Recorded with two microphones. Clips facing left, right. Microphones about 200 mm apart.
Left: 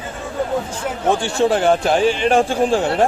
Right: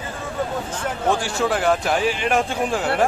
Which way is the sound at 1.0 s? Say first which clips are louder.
Left 5 dB; 25° left (ahead or behind).